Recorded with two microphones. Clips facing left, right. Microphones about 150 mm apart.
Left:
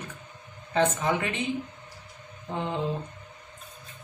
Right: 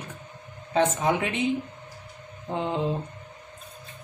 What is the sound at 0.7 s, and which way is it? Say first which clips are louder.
Speech: right 2 dB; 20° right (ahead or behind).